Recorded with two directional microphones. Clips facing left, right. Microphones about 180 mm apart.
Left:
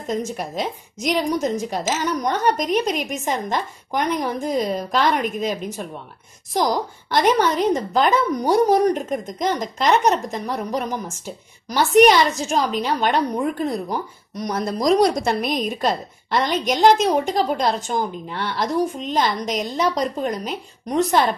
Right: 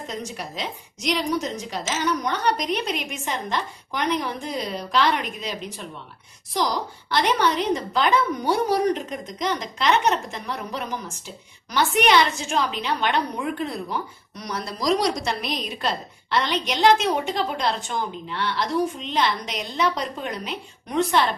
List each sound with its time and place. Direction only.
0.0 s a woman's voice: 45° left (ahead or behind)